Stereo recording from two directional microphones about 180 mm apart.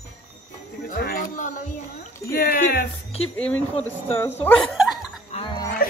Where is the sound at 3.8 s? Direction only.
10° left (ahead or behind).